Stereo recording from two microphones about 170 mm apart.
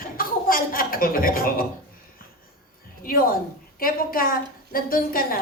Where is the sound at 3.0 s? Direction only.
55° left (ahead or behind).